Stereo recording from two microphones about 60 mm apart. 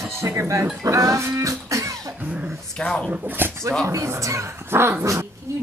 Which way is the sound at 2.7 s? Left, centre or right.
Centre.